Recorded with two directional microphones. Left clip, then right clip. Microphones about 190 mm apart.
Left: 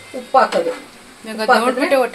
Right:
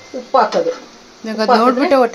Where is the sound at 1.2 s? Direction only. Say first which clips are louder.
Right 2 dB; 45° right (ahead or behind).